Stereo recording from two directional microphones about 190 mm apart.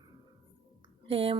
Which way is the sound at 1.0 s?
30° right (ahead or behind).